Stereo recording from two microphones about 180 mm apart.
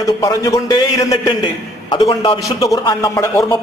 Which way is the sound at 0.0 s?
20° left (ahead or behind).